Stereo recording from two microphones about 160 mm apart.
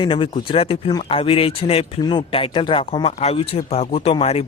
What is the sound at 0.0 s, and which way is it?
Speech, 35° left (ahead or behind).